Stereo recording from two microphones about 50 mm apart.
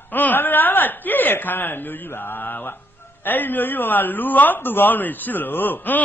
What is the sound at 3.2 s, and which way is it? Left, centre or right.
A man's voice, left.